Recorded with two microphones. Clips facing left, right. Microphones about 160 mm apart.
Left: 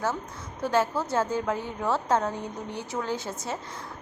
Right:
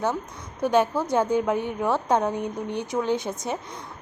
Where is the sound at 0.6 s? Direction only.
15° right (ahead or behind).